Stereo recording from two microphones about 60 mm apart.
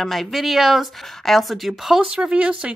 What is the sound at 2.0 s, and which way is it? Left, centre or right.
Speech, centre.